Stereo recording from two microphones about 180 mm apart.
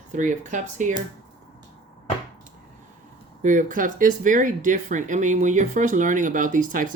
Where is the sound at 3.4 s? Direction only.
45° right (ahead or behind).